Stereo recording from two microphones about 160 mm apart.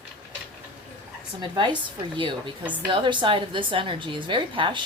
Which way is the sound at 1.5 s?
30° right (ahead or behind).